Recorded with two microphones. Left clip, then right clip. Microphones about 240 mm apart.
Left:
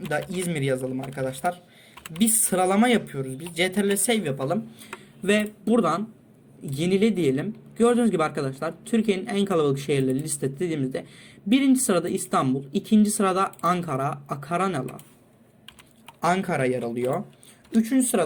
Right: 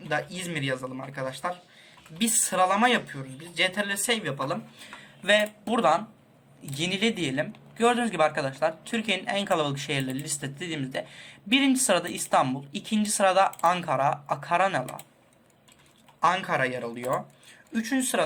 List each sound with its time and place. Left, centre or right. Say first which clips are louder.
0.1 s speech: left 1 dB; left
5.2 s speech: right 1 dB; centre
16.2 s speech: left 1 dB; left